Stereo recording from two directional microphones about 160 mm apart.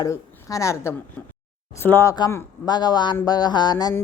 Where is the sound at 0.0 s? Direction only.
20° left (ahead or behind).